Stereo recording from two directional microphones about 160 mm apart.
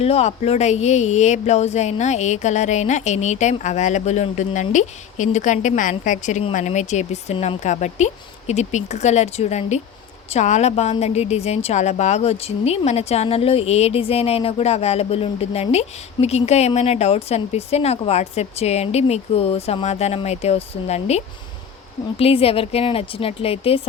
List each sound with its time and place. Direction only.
0.0 s a woman's voice: 40° left (ahead or behind)
22.2 s a woman's voice: 35° left (ahead or behind)